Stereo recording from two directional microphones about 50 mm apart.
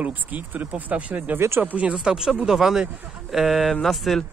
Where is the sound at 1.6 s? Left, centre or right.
Right.